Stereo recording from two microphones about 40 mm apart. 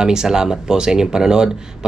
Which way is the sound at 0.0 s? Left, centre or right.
Centre.